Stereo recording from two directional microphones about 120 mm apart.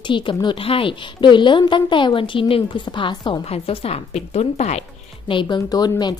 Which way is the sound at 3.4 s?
55° left (ahead or behind).